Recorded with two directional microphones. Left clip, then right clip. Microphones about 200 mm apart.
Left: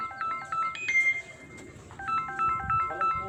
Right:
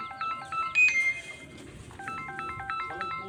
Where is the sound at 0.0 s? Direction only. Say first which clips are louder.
Left 1 dB; 15° right (ahead or behind).